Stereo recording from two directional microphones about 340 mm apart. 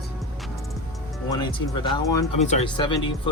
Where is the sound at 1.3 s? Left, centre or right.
Centre.